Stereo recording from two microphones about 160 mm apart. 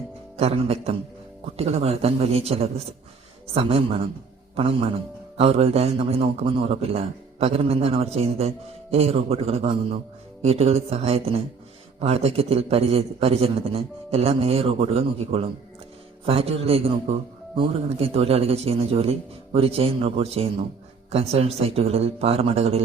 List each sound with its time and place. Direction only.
0.3 s a man's voice: 40° right (ahead or behind)